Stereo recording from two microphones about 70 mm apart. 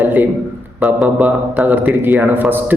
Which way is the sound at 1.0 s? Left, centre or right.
Right.